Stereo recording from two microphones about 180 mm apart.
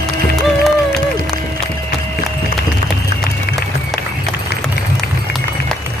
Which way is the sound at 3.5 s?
60° left (ahead or behind).